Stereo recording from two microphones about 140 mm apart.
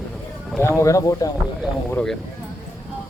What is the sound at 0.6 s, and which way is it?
Speech, 20° left (ahead or behind).